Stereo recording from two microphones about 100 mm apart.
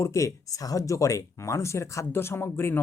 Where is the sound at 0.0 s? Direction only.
30° left (ahead or behind).